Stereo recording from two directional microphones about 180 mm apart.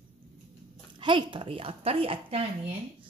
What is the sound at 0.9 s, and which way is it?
Speech, 25° right (ahead or behind).